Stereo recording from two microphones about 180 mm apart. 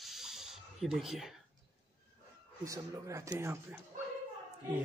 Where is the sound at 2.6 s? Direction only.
15° right (ahead or behind).